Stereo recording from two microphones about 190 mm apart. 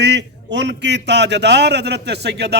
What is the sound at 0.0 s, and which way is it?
A man's voice, 65° right (ahead or behind).